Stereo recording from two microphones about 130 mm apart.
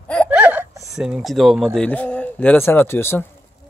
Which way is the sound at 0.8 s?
5° right (ahead or behind).